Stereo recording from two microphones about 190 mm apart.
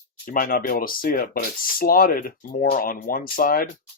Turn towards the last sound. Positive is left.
turn(degrees=50)  # may be behind; listen again after turning